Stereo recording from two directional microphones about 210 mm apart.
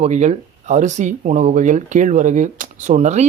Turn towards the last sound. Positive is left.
turn(degrees=-35)  # may be behind; listen again after turning